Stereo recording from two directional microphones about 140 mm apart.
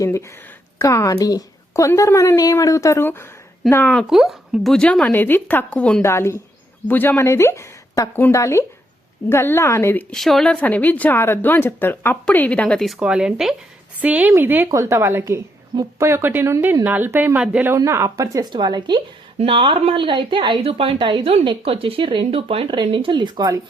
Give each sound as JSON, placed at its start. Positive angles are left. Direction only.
{"t": 0.0, "sound": "a woman's voice", "side_deg": 20}
{"t": 4.0, "sound": "a woman's voice", "side_deg": 0}
{"t": 6.0, "sound": "a woman's voice", "side_deg": 20}
{"t": 10.2, "sound": "a woman's voice", "side_deg": 0}
{"t": 13.0, "sound": "speech", "side_deg": -5}